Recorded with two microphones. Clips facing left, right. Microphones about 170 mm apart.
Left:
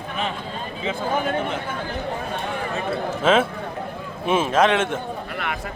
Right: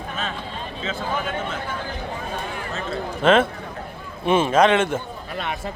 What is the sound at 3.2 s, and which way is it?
A man's voice, 5° left (ahead or behind).